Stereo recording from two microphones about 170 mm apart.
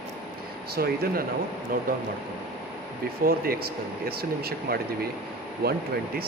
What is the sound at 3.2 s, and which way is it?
Speech, 60° right (ahead or behind).